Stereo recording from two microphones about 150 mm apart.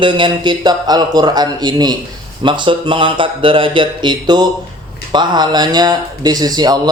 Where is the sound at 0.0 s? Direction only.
35° right (ahead or behind).